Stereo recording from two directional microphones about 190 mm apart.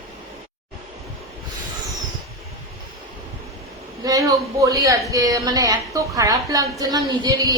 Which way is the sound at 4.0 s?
20° right (ahead or behind).